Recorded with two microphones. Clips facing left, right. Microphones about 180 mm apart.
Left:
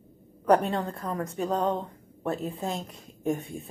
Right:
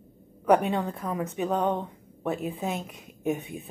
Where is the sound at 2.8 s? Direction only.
15° right (ahead or behind).